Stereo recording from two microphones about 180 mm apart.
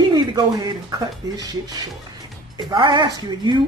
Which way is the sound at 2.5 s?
25° right (ahead or behind).